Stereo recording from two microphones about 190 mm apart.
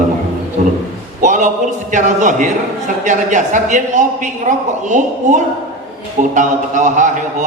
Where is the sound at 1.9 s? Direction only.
40° right (ahead or behind).